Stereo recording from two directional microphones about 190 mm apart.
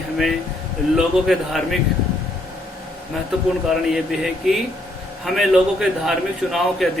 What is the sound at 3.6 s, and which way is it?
Speech, centre (ahead or behind).